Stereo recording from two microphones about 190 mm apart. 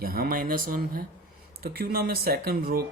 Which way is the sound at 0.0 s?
50° right (ahead or behind).